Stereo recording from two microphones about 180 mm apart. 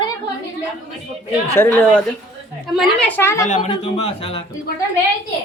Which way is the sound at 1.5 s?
10° left (ahead or behind).